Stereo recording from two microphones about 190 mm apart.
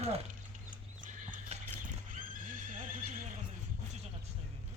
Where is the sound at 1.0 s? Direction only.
45° right (ahead or behind).